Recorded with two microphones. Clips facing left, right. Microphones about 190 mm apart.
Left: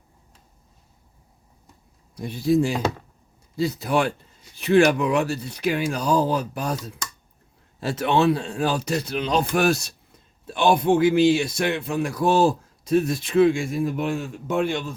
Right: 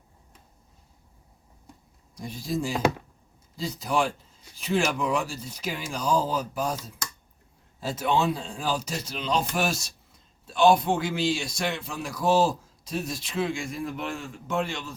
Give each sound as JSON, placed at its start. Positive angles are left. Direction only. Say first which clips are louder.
{"t": 2.1, "sound": "a man's voice", "louder": "left 10 dB", "side_deg": 60}